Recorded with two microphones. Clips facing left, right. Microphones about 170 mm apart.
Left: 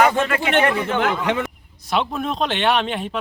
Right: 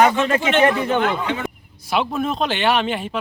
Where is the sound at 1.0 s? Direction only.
70° left (ahead or behind).